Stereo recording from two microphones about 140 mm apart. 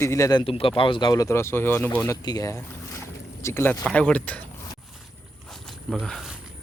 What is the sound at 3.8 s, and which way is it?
Speech, 10° left (ahead or behind).